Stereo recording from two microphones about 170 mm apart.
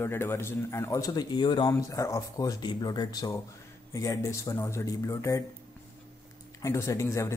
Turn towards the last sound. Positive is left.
turn(degrees=15)  # may be behind; listen again after turning